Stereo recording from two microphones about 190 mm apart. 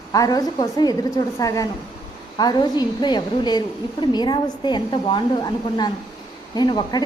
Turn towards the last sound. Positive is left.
turn(degrees=25)  # may be behind; listen again after turning